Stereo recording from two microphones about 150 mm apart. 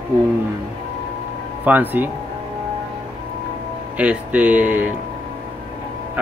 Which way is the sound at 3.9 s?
10° right (ahead or behind).